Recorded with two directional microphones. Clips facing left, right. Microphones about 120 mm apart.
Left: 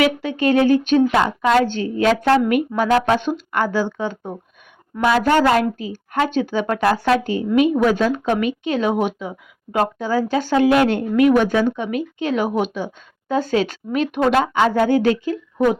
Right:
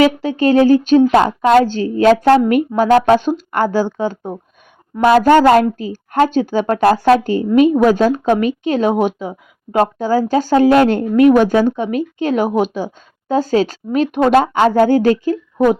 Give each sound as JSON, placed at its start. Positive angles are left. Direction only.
{"t": 0.0, "sound": "speech", "side_deg": -35}